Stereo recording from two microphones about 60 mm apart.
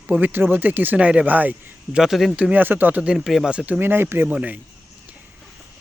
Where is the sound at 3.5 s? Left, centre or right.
Right.